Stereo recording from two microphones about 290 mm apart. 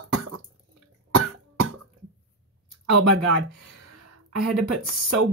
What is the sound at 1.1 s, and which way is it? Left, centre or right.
Cough, right.